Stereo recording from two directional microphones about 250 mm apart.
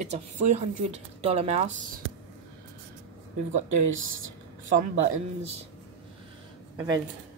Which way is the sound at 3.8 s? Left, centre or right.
Right.